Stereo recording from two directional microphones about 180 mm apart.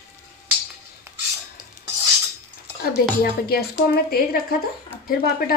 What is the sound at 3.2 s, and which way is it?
A woman's voice, 55° left (ahead or behind).